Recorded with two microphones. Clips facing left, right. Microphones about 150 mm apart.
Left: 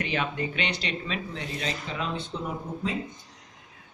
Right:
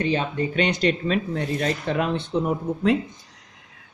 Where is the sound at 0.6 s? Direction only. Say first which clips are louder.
Right 10 dB; 45° right (ahead or behind).